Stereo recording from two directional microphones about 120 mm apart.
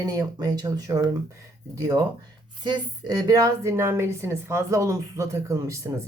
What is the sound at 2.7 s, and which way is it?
A woman's voice, 30° right (ahead or behind).